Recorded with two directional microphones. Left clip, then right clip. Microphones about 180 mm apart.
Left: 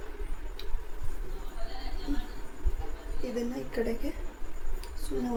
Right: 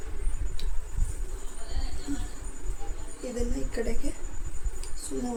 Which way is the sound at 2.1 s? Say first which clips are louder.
Even; 10° right (ahead or behind).